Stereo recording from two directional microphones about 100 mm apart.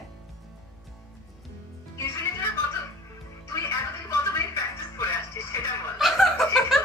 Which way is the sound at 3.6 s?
30° left (ahead or behind).